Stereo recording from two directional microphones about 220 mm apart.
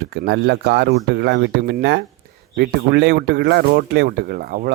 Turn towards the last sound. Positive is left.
turn(degrees=-40)  # may be behind; listen again after turning